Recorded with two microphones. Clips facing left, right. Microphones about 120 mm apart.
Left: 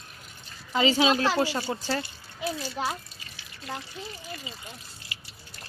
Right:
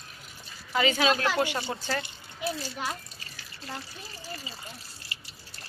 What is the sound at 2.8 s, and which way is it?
Speech, 30° left (ahead or behind).